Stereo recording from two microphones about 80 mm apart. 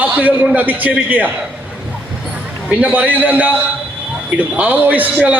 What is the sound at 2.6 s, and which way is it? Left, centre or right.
Speech, centre.